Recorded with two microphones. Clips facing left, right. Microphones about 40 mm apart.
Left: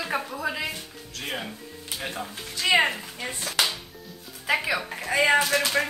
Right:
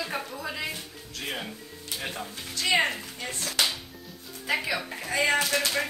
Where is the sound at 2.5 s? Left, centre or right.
Centre.